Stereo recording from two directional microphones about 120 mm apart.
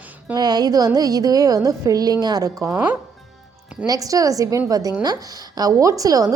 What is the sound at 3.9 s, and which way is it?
A woman's voice, 30° right (ahead or behind).